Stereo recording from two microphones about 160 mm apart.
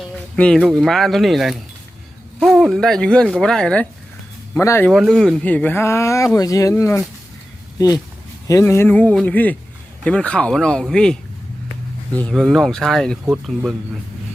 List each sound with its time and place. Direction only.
0.3 s speech: 5° left (ahead or behind)
4.9 s speech: centre (ahead or behind)